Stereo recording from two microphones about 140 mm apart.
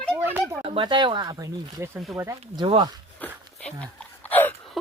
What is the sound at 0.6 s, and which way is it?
Speech, 40° right (ahead or behind).